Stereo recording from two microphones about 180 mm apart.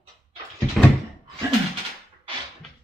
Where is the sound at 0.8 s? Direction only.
5° left (ahead or behind).